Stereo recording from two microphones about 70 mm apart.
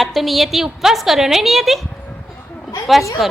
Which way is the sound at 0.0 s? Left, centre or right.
Centre.